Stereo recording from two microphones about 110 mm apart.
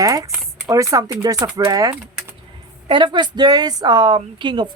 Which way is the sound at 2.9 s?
45° right (ahead or behind).